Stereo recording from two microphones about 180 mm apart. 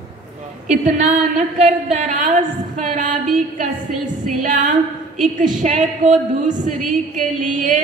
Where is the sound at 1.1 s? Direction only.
40° right (ahead or behind).